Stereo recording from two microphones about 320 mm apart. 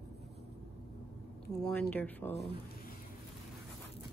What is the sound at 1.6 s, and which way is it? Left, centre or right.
Speech, centre.